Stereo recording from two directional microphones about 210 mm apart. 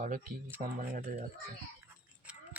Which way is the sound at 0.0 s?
40° right (ahead or behind).